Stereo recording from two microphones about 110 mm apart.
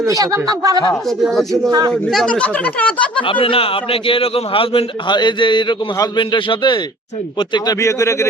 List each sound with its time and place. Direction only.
0.0 s speech: 30° right (ahead or behind)
1.0 s speech: centre (ahead or behind)
3.2 s a man's voice: 50° left (ahead or behind); by 8.3 s 25° left (ahead or behind)